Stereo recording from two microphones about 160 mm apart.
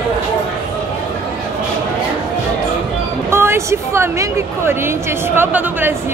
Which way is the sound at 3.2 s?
15° right (ahead or behind).